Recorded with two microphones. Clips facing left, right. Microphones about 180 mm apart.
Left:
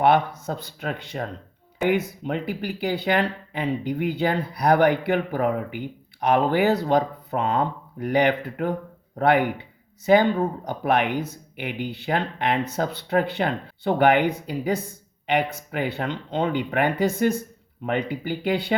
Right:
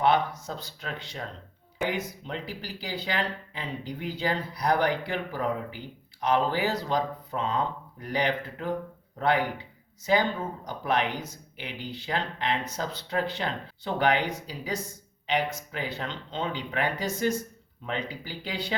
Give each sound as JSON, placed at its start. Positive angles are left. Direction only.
{"t": 0.0, "sound": "speech", "side_deg": 55}
{"t": 10.7, "sound": "speech", "side_deg": 55}